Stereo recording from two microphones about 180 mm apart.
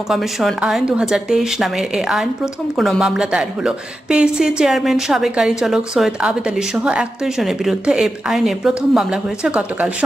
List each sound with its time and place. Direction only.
0.1 s speech: centre (ahead or behind)